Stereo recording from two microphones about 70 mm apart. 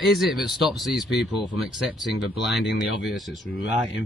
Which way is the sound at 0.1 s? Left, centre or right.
Centre.